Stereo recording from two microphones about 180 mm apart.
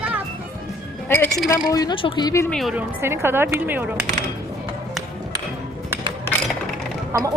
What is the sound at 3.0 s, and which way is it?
Speech, 15° right (ahead or behind).